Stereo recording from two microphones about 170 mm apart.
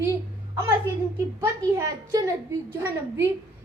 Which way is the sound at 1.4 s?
15° right (ahead or behind).